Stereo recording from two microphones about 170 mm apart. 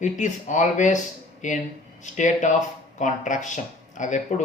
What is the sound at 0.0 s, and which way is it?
Speech, 45° left (ahead or behind).